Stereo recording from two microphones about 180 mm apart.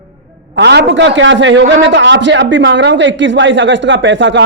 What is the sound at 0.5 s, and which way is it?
A man's voice, 70° right (ahead or behind).